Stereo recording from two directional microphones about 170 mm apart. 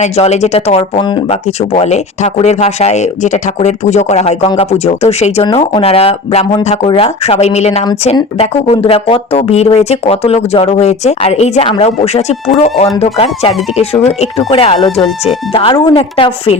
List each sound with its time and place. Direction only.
0.0 s speech: 40° left (ahead or behind)
1.5 s speech: 40° left (ahead or behind)
5.5 s speech: 25° left (ahead or behind)